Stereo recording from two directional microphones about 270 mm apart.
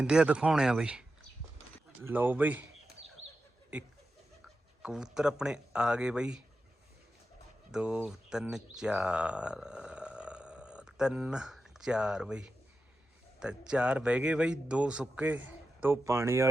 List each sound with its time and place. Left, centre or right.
0.0 s speech: centre
3.2 s a sound: right
3.7 s speech: centre
7.7 s speech: centre